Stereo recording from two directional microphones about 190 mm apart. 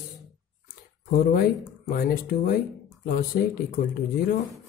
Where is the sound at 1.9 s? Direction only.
45° left (ahead or behind).